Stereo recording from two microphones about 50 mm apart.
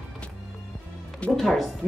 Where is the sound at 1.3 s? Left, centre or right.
Centre.